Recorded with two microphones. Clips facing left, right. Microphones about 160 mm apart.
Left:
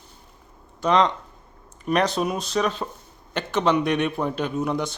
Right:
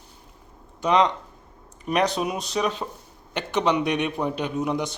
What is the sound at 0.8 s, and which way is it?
A man's voice, 15° right (ahead or behind).